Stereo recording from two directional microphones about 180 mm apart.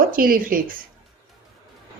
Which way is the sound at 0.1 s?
50° right (ahead or behind).